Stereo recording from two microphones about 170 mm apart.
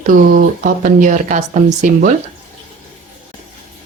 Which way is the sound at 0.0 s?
55° right (ahead or behind).